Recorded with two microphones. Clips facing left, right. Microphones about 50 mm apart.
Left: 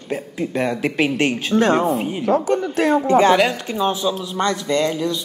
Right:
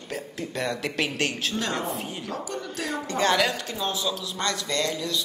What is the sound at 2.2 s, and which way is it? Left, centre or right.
Speech, left.